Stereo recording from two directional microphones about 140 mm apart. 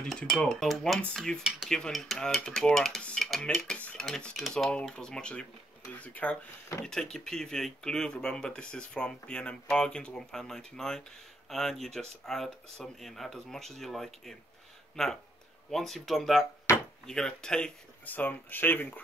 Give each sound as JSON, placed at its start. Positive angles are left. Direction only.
{"t": 0.1, "sound": "speech", "side_deg": 5}
{"t": 16.7, "sound": "chop", "side_deg": 20}
{"t": 17.0, "sound": "speech", "side_deg": 5}